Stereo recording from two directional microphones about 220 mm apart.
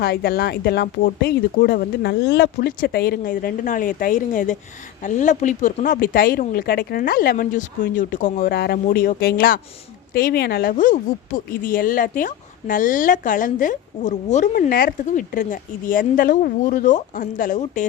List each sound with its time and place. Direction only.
0.0 s speech: 45° left (ahead or behind)